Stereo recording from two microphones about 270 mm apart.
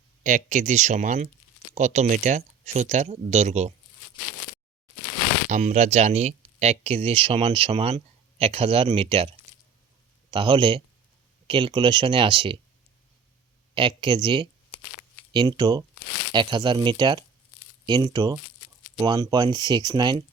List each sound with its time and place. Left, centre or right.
0.2 s speech: right
5.5 s speech: right
10.3 s speech: centre
13.7 s speech: centre